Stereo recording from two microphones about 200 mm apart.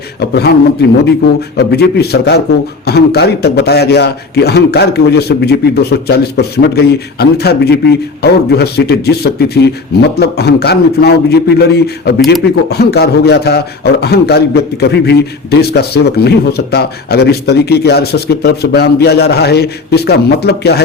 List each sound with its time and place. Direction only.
0.2 s a man's voice: 55° left (ahead or behind)